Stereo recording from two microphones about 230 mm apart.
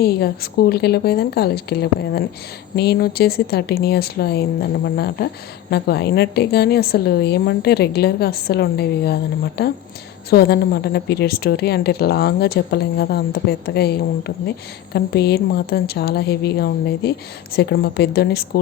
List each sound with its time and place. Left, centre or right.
0.0 s a woman's voice: left